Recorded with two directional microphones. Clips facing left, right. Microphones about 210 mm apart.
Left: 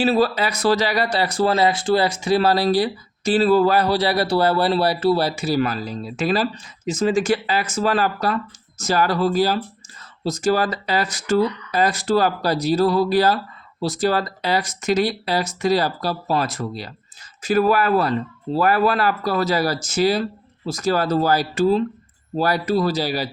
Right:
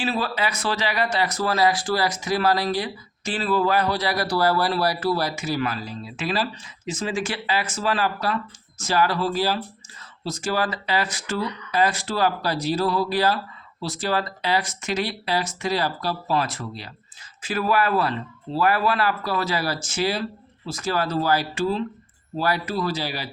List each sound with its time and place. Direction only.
0.0 s speech: 40° left (ahead or behind)